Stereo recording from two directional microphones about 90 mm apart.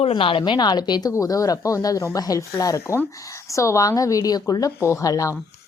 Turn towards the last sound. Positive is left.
turn(degrees=40)  # may be behind; listen again after turning